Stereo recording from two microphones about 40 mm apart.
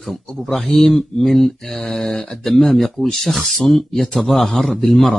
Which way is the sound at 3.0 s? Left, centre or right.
Centre.